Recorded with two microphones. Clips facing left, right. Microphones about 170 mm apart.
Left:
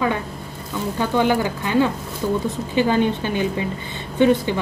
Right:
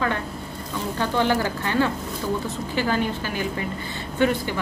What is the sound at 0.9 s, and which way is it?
Speech, 15° left (ahead or behind).